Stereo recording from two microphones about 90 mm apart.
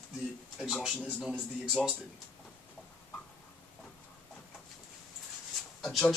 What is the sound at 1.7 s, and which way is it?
Speech, 10° left (ahead or behind).